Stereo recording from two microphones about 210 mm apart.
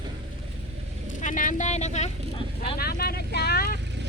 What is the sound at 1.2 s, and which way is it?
Speech, 40° left (ahead or behind).